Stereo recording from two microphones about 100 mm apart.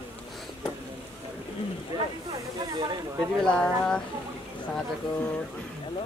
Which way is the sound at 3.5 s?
10° left (ahead or behind).